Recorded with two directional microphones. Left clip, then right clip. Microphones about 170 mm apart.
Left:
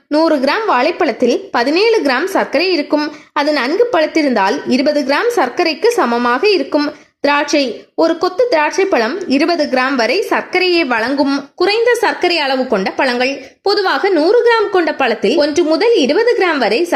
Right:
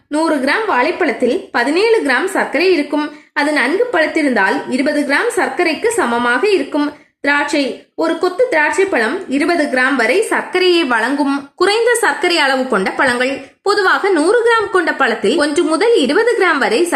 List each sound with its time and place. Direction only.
0.1 s a woman's voice: 40° left (ahead or behind); by 16.8 s 20° left (ahead or behind)